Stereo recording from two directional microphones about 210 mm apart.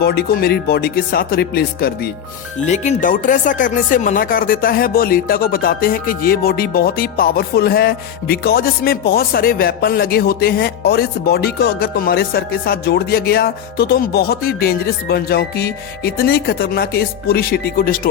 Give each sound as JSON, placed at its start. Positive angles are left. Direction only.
{"t": 0.0, "sound": "speech", "side_deg": 50}
{"t": 2.6, "sound": "speech", "side_deg": 35}